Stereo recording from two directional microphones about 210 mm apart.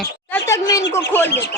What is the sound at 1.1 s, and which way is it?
Speech, 10° left (ahead or behind).